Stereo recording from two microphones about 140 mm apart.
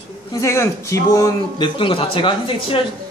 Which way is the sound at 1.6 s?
40° left (ahead or behind).